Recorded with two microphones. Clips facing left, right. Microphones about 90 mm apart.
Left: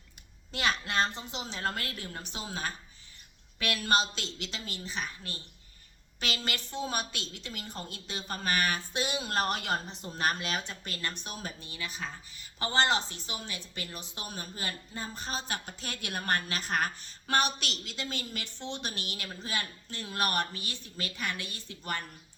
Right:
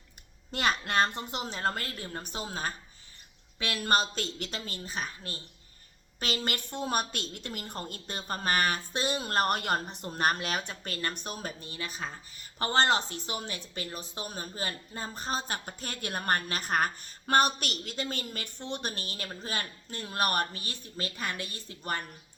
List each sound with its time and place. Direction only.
0.5 s a woman's voice: 45° right (ahead or behind)
1.5 s a woman's voice: 35° right (ahead or behind)
3.8 s a woman's voice: 40° right (ahead or behind)